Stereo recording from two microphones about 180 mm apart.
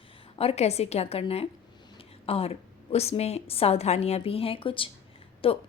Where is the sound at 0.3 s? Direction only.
35° left (ahead or behind).